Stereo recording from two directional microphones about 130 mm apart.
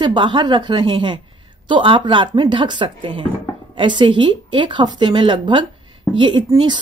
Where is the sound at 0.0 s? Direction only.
35° right (ahead or behind).